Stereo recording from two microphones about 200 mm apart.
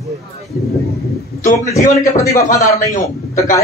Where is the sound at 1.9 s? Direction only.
15° left (ahead or behind).